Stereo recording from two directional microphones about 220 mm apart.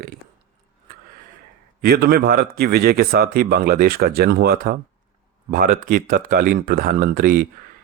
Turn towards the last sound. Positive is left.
turn(degrees=-40)  # may be behind; listen again after turning